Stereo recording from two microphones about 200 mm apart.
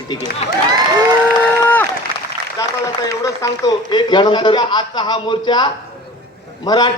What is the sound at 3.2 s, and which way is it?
A man's voice, 15° left (ahead or behind).